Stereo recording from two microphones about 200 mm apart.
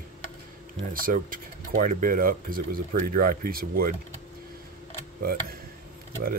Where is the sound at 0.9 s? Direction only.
45° right (ahead or behind).